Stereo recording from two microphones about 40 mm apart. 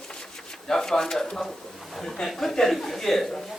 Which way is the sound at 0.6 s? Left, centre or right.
Centre.